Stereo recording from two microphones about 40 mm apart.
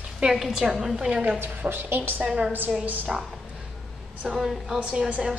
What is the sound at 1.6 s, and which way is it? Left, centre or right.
Speech, right.